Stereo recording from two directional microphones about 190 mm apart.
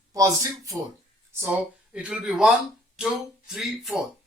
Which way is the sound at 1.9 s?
5° right (ahead or behind).